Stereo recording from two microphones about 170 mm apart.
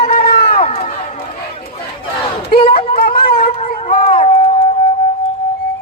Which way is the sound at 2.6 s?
30° left (ahead or behind).